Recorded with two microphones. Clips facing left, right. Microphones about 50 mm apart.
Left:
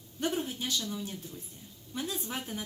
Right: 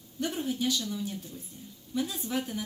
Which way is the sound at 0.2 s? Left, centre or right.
Left.